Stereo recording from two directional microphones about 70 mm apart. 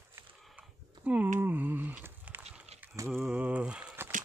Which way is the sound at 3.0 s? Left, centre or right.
Right.